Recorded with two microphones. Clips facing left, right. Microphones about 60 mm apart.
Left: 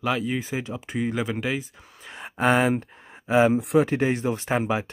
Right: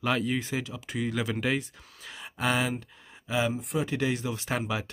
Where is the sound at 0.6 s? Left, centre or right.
Left.